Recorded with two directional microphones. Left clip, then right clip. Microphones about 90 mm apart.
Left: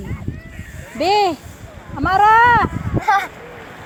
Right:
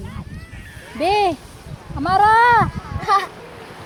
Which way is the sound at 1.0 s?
60° left (ahead or behind).